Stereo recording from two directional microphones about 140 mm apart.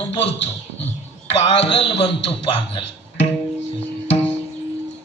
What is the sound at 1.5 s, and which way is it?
Music, 45° left (ahead or behind).